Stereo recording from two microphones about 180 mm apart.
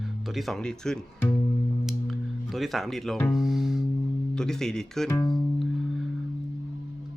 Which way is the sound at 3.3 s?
Centre (ahead or behind).